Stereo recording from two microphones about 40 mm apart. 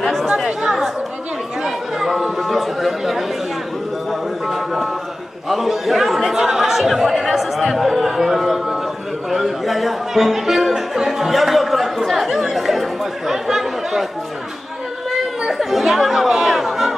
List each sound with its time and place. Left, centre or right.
0.0 s chatter: centre
0.5 s chatter: centre
4.1 s a sound: centre
5.5 s chatter: centre
7.7 s a sound: centre
9.3 s music: centre
10.7 s chatter: centre
15.4 s chatter: centre